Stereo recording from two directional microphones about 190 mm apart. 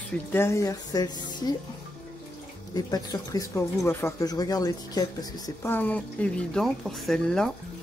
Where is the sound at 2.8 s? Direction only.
20° left (ahead or behind).